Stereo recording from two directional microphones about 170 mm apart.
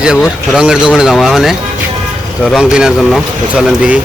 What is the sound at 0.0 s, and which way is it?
Speech, 5° right (ahead or behind).